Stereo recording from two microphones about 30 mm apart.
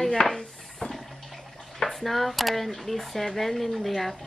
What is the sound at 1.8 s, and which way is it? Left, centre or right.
Speech, centre.